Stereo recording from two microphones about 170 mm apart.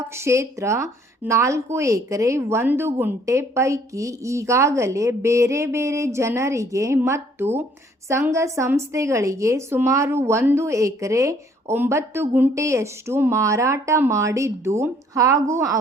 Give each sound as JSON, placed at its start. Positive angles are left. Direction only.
{"t": 0.3, "sound": "a woman's voice", "side_deg": -15}